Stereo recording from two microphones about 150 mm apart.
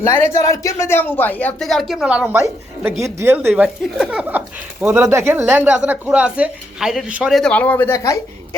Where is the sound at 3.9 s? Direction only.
Centre (ahead or behind).